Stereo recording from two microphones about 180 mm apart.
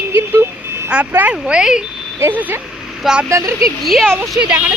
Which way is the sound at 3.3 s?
15° right (ahead or behind).